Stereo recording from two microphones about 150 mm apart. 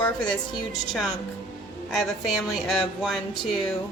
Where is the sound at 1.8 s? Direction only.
Centre (ahead or behind).